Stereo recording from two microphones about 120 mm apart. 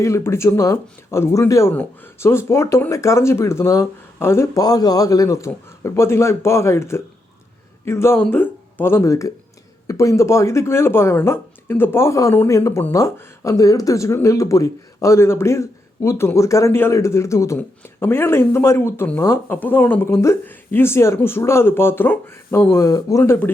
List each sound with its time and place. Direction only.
0.0 s speech: 25° left (ahead or behind)